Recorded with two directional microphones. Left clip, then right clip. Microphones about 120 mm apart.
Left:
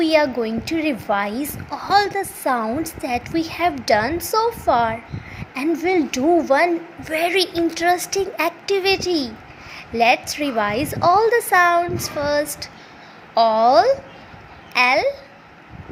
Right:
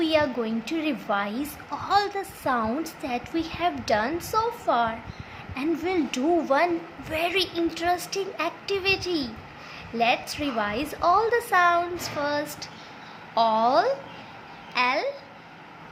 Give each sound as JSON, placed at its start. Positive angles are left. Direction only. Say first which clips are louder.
{"t": 0.0, "sound": "a woman's voice", "louder": "left 6 dB", "side_deg": 30}